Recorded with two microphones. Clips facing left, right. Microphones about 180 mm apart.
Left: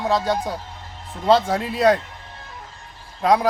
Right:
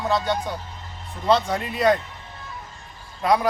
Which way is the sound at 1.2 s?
30° left (ahead or behind).